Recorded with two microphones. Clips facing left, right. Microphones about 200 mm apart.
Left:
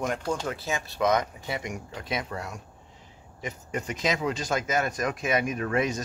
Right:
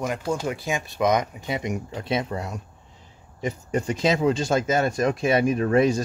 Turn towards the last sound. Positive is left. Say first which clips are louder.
# right 8 dB
turn(degrees=-30)  # may be behind; listen again after turning